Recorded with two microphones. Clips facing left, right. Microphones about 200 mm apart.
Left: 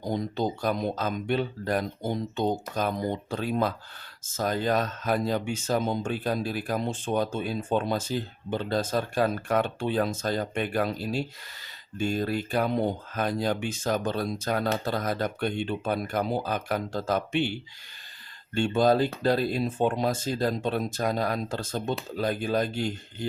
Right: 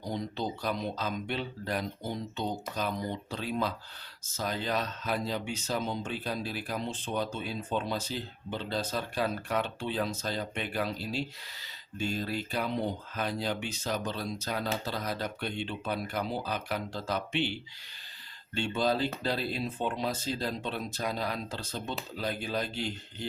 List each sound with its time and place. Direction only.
0.0 s speech: 50° left (ahead or behind)
18.5 s speech: 50° left (ahead or behind)